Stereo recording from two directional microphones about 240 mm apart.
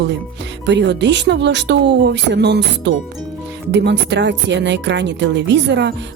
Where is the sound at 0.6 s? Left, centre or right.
Right.